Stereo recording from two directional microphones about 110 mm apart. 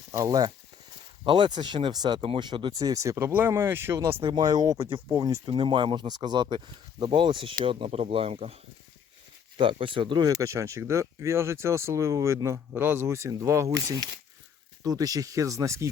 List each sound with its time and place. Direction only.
0.1 s speech: 35° right (ahead or behind)
1.2 s speech: 50° right (ahead or behind)
2.7 s speech: 35° right (ahead or behind)
4.3 s speech: 35° right (ahead or behind)
5.5 s speech: 50° right (ahead or behind)
9.6 s speech: 50° right (ahead or behind); by 15.9 s 25° right (ahead or behind)